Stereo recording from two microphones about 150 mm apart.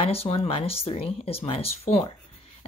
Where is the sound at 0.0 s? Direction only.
40° left (ahead or behind).